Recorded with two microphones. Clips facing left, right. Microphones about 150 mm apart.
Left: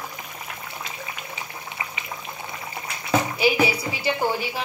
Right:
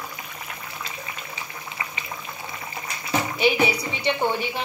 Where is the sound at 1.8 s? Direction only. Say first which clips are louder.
Even; 20° left (ahead or behind).